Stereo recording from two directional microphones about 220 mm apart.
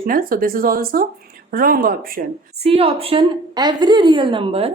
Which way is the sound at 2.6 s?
25° right (ahead or behind).